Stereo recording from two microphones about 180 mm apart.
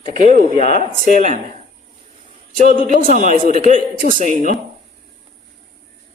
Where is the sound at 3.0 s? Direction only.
50° right (ahead or behind).